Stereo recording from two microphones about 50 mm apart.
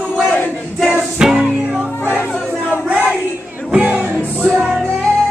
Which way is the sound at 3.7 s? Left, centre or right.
Right.